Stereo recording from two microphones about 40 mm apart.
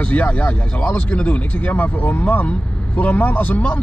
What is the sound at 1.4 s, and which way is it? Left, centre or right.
Speech, left.